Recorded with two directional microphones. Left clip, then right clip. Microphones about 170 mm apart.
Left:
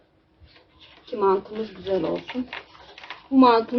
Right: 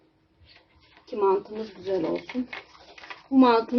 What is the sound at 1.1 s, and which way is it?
Speech, centre (ahead or behind).